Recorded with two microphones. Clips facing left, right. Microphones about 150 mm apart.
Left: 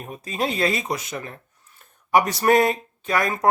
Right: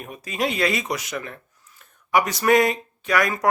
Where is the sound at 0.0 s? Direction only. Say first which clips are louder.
Even; 35° left (ahead or behind).